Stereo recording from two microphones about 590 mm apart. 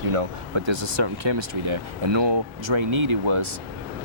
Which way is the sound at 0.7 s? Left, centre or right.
Right.